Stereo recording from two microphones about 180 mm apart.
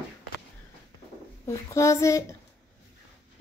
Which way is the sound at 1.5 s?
15° left (ahead or behind).